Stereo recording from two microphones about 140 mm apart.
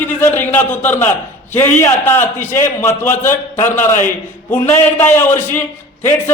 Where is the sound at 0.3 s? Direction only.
15° left (ahead or behind).